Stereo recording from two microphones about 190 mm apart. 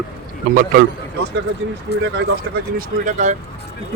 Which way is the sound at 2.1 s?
50° right (ahead or behind).